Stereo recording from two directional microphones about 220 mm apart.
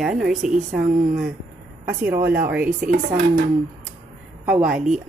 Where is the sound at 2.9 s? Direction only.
35° right (ahead or behind).